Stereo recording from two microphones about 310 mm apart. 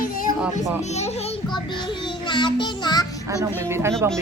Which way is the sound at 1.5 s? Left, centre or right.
Centre.